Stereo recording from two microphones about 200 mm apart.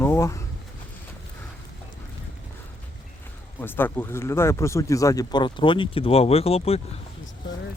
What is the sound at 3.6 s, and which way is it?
Speech, 10° left (ahead or behind).